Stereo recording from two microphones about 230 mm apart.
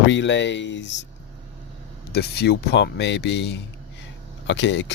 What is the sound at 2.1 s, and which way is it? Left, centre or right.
Speech, left.